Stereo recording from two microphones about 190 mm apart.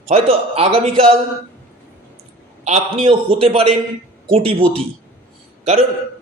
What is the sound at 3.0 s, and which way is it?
A man's voice, 30° right (ahead or behind).